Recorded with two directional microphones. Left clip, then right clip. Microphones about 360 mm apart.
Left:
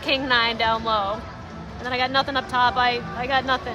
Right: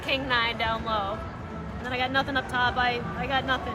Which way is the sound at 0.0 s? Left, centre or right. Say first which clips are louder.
Left 5 dB; left.